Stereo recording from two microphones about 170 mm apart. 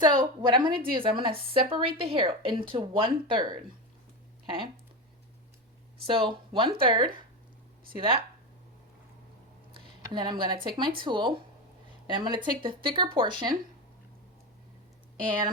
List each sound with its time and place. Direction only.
0.0 s speech: 25° right (ahead or behind)
6.1 s speech: 30° right (ahead or behind)
10.0 s speech: 25° right (ahead or behind)